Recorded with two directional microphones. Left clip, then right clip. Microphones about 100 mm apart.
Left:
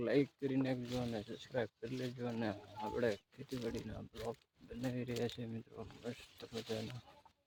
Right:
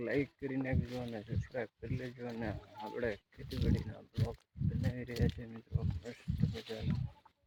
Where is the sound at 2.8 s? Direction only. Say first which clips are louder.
Left 2 dB; 5° right (ahead or behind).